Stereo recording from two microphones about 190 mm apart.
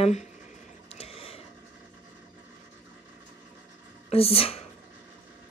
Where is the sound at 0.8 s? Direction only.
30° left (ahead or behind).